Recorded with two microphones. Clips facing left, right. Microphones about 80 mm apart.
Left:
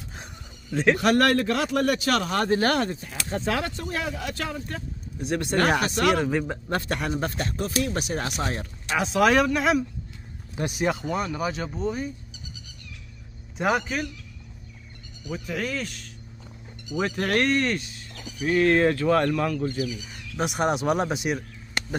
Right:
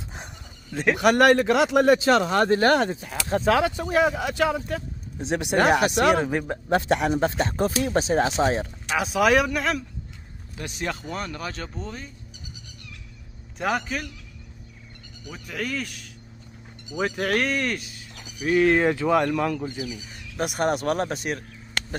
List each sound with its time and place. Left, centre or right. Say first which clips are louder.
0.7 s speech: right 1 dB; centre
1.3 s speech: right 5 dB; centre
3.0 s speech: right 5 dB; centre
5.2 s speech: right 2 dB; centre
6.3 s speech: even; centre
6.7 s speech: right 7 dB; centre
8.9 s speech: even; centre
10.8 s speech: left 4 dB; centre
13.6 s speech: left 2 dB; centre
15.3 s speech: left 1 dB; centre
20.3 s speech: even; centre
21.8 s chop: even; centre